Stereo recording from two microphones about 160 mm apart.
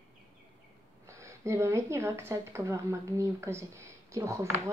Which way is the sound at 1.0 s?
15° right (ahead or behind).